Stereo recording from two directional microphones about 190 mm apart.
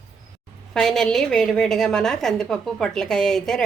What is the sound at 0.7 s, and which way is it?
A woman's voice, centre (ahead or behind).